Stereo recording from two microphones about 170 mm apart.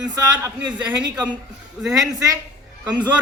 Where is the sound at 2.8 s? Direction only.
10° right (ahead or behind).